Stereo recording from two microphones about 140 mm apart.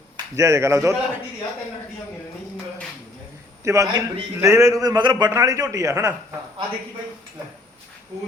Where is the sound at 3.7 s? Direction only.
25° right (ahead or behind).